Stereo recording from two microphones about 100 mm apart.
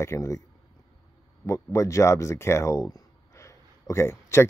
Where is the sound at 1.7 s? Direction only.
30° left (ahead or behind).